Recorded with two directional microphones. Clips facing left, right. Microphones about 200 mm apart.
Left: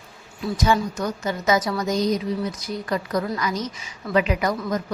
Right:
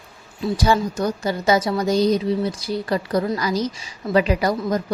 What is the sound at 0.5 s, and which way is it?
A woman's voice, 30° right (ahead or behind).